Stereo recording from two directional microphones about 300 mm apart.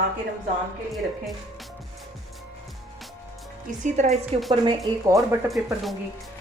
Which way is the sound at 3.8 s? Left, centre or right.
Right.